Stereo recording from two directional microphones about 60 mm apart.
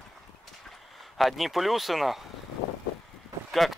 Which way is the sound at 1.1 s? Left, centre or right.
Centre.